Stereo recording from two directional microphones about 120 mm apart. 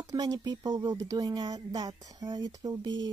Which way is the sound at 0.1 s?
30° right (ahead or behind).